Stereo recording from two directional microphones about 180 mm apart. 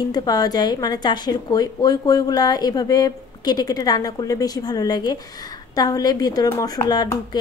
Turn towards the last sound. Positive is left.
turn(degrees=20)  # may be behind; listen again after turning